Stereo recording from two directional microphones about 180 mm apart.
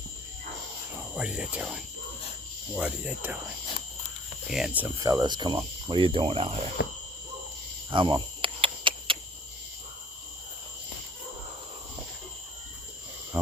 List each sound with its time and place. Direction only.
1.1 s speech: 5° right (ahead or behind)
2.7 s cricket: 5° right (ahead or behind)
4.4 s speech: centre (ahead or behind)
4.9 s speech: 20° right (ahead or behind)
6.8 s cricket: 65° left (ahead or behind)
7.9 s cricket: 25° right (ahead or behind)
13.4 s a sound: 10° right (ahead or behind)